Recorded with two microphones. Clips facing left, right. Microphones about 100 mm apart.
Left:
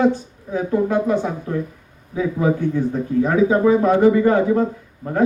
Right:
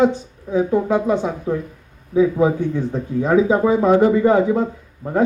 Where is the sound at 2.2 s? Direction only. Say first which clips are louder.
Right 4 dB; 15° right (ahead or behind).